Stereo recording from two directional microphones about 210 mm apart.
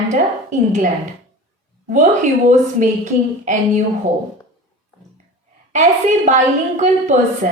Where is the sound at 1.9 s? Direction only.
35° right (ahead or behind).